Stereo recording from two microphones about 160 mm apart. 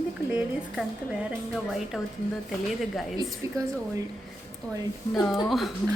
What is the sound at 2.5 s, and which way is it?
Speech, centre (ahead or behind).